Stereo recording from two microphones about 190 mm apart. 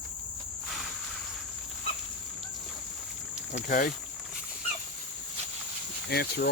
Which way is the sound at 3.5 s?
45° left (ahead or behind).